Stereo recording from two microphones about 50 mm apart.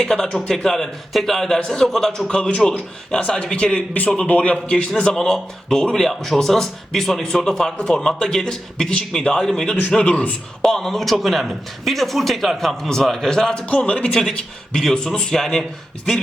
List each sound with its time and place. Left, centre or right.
0.0 s speech: centre
2.2 s a man's voice: centre
9.9 s a man's voice: left
10.6 s speech: centre
13.7 s speech: left; by 15.6 s centre